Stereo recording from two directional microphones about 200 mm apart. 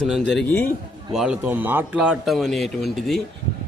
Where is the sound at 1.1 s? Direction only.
5° right (ahead or behind).